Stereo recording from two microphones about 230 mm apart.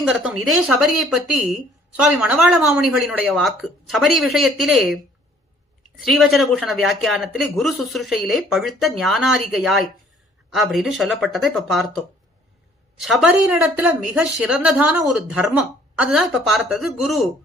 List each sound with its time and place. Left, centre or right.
0.0 s speech: centre
6.0 s speech: centre
13.0 s speech: centre